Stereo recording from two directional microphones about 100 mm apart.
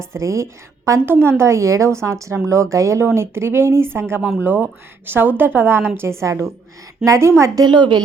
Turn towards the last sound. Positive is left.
turn(degrees=-50)  # may be behind; listen again after turning